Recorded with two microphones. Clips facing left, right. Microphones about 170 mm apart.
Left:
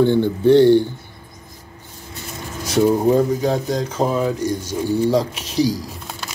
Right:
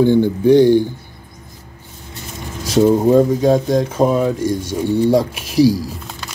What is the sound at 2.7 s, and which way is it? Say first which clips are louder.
Speech: right 4 dB; 25° right (ahead or behind).